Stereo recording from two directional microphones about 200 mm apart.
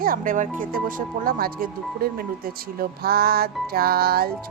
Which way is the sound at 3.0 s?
50° right (ahead or behind).